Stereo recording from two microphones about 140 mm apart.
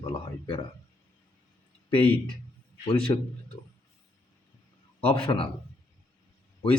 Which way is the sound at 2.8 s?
40° left (ahead or behind).